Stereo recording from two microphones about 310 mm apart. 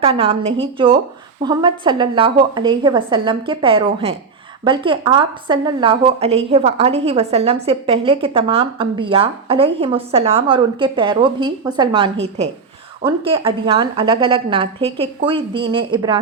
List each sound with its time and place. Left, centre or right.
0.0 s a woman's voice: centre